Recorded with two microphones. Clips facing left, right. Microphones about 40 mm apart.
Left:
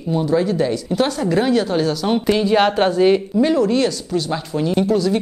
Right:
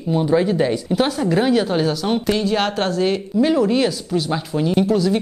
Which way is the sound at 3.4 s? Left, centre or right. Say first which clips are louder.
Right 3 dB; centre.